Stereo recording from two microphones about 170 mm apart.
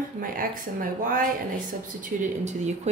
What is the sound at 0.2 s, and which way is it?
Speech, 55° right (ahead or behind).